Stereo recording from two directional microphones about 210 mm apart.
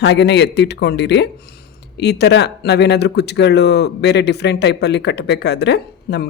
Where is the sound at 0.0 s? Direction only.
55° left (ahead or behind).